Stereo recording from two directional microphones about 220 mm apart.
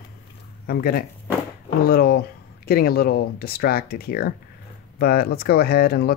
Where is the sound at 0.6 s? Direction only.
45° left (ahead or behind).